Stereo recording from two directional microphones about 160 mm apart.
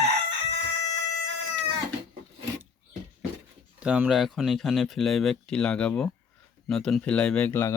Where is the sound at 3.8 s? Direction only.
10° right (ahead or behind).